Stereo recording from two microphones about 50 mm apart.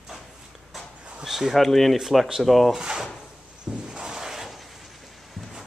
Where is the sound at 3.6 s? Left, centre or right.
Centre.